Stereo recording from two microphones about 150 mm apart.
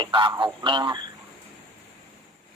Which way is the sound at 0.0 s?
30° right (ahead or behind).